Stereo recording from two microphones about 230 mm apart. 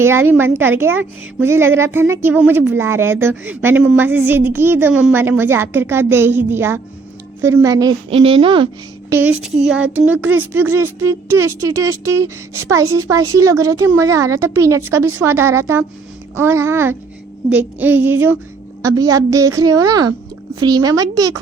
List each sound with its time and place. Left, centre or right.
0.0 s a woman's voice: centre
9.4 s child singing: centre
10.0 s a woman's voice: centre